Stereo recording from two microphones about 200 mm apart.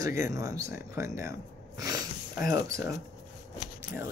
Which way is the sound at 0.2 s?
15° right (ahead or behind).